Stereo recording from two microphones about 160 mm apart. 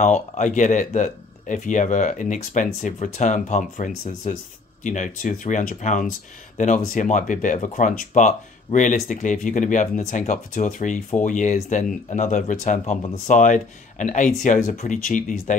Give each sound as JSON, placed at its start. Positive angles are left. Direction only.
{"t": 0.0, "sound": "speech", "side_deg": 50}